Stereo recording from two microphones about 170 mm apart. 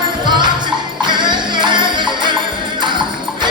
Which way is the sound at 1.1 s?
25° right (ahead or behind).